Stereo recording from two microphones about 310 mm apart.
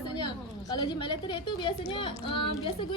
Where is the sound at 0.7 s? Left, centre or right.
Centre.